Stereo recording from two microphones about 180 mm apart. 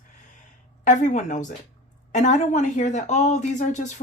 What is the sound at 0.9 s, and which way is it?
A woman's voice, 45° left (ahead or behind).